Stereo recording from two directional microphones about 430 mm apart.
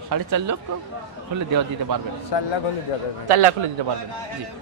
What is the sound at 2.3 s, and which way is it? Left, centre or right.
Speech, left.